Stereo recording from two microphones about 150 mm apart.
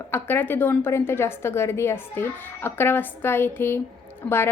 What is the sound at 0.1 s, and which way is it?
A woman's voice, 15° left (ahead or behind).